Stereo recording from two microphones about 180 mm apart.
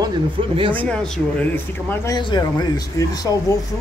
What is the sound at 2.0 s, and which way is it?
Speech, 25° left (ahead or behind).